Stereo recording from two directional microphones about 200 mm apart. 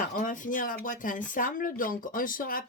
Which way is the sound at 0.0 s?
40° left (ahead or behind).